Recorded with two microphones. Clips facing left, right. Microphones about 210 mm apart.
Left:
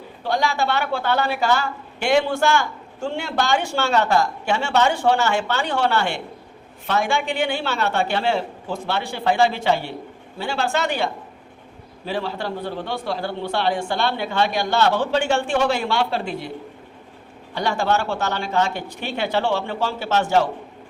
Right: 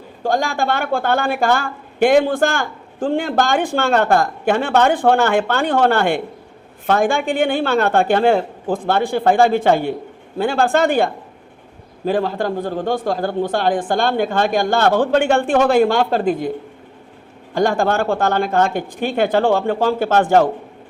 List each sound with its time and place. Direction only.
0.2 s a woman's voice: 45° right (ahead or behind)
17.5 s a woman's voice: 50° right (ahead or behind)